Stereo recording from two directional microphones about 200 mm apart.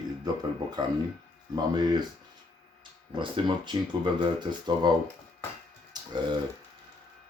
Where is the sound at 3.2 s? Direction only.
25° right (ahead or behind).